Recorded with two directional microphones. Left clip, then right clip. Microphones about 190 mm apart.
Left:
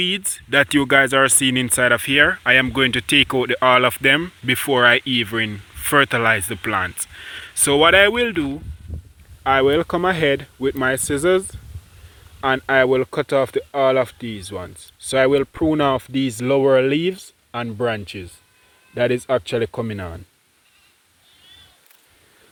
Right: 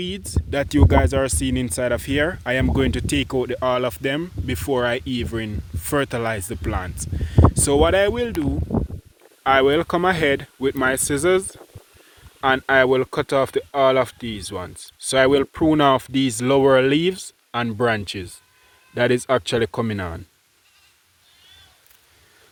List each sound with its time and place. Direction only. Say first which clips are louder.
0.0 s speech: left 8 dB; centre (ahead or behind)